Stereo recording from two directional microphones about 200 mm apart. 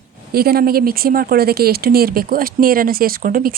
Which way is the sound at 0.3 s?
50° right (ahead or behind).